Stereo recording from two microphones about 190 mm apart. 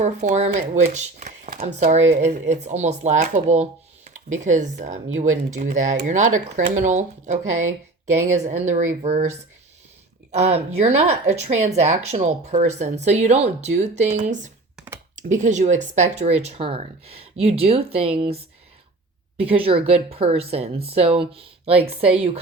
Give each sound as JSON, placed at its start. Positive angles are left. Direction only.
{"t": 0.0, "sound": "speech", "side_deg": -35}
{"t": 10.3, "sound": "speech", "side_deg": -35}